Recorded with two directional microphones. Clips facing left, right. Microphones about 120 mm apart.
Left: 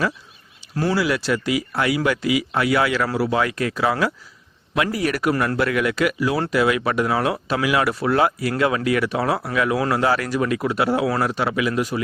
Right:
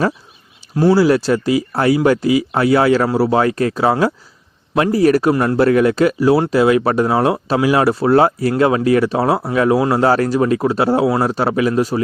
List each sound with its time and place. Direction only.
0.8 s speech: 30° right (ahead or behind)